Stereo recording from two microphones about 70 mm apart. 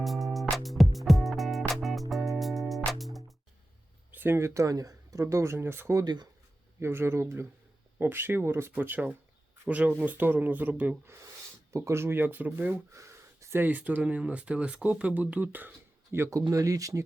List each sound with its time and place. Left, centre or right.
0.0 s music: centre
4.1 s speech: right
11.8 s speech: right
12.9 s a sound: right
13.6 s speech: right
16.1 s speech: right
16.5 s speech: right